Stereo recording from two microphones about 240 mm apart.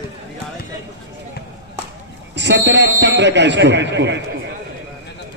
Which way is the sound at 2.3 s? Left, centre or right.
Right.